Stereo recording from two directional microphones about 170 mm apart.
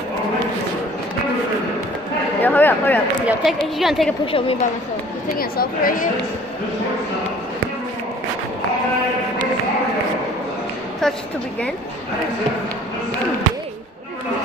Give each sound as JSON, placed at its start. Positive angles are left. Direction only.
{"t": 2.4, "sound": "a sound", "side_deg": 10}
{"t": 3.3, "sound": "a woman's voice", "side_deg": 0}
{"t": 4.3, "sound": "a woman's voice", "side_deg": 30}
{"t": 5.3, "sound": "speech", "side_deg": 60}